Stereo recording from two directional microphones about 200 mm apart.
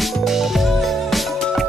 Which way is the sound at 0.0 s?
Centre (ahead or behind).